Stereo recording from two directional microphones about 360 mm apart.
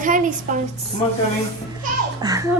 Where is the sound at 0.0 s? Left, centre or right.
Right.